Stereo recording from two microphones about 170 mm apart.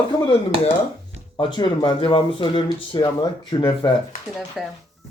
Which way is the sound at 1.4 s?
25° left (ahead or behind).